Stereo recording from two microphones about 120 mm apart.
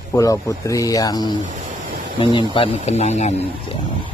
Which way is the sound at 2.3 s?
45° left (ahead or behind).